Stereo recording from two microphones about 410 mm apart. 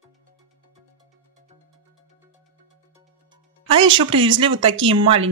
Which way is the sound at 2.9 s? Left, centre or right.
Centre.